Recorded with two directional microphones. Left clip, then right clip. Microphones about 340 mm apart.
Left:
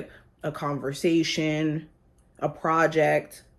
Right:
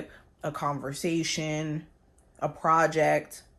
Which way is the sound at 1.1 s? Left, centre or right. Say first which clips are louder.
Left 4 dB; centre.